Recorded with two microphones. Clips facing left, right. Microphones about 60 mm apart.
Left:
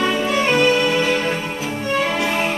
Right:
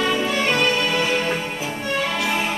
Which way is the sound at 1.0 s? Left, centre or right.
Centre.